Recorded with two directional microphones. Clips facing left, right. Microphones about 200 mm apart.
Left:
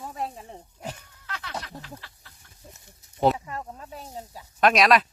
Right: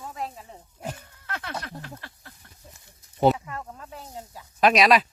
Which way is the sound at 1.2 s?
55° right (ahead or behind).